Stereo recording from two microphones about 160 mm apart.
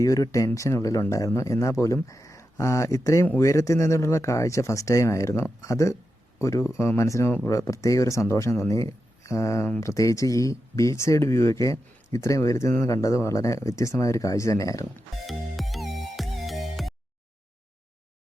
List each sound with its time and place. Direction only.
0.0 s speech: 20° left (ahead or behind)
15.3 s music: centre (ahead or behind)